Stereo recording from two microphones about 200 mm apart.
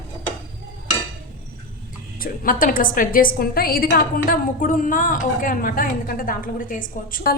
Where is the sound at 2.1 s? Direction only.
45° left (ahead or behind).